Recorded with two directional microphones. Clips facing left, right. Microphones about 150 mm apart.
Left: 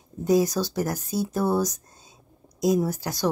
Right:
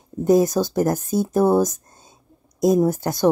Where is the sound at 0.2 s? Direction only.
50° right (ahead or behind).